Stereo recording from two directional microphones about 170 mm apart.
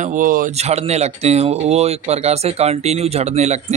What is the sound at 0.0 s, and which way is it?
Speech, 50° right (ahead or behind).